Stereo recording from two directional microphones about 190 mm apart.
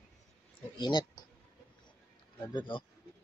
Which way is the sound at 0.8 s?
25° left (ahead or behind).